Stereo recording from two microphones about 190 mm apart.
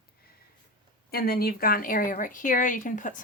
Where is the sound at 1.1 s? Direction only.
55° left (ahead or behind).